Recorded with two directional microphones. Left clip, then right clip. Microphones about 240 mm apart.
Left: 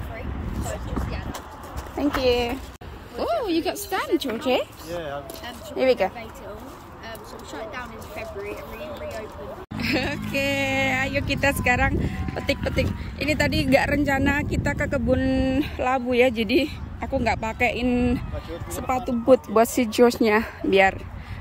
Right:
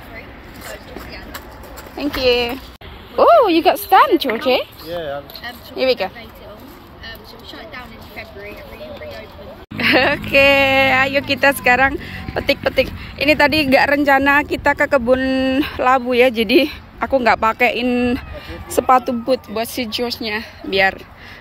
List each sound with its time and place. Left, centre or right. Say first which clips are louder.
2.0 s speech: right 5 dB; centre
9.8 s speech: right 12 dB; centre